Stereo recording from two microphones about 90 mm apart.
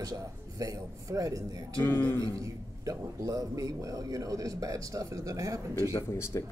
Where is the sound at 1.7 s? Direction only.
20° left (ahead or behind).